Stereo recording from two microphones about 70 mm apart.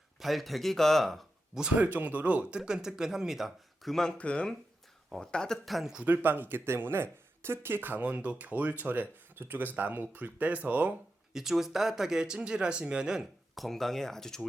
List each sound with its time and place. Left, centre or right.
0.2 s speech: centre
1.7 s speech: right; by 4.1 s centre
4.2 s speech: centre
5.6 s speech: centre
5.9 s speech: centre
6.2 s speech: right
11.3 s speech: centre